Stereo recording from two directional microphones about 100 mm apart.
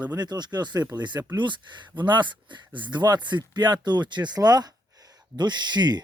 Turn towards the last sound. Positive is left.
turn(degrees=-45)  # may be behind; listen again after turning